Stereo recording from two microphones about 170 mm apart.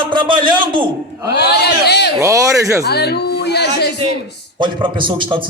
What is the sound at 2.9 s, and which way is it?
Speech, 70° left (ahead or behind).